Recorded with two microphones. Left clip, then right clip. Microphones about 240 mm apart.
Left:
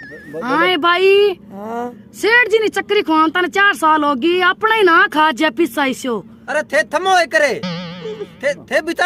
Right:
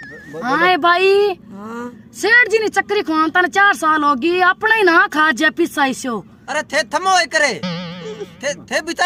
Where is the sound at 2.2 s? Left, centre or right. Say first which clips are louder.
Even; right.